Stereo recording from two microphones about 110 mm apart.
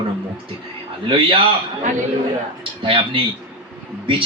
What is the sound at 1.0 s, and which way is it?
Speech, 55° right (ahead or behind).